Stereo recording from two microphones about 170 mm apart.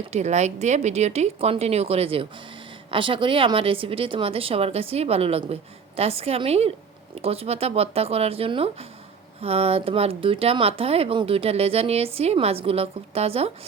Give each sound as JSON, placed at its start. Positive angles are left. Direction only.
{"t": 0.1, "sound": "speech", "side_deg": -40}